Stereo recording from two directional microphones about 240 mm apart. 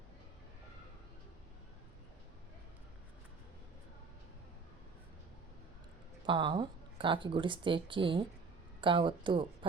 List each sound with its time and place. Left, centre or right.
6.2 s speech: centre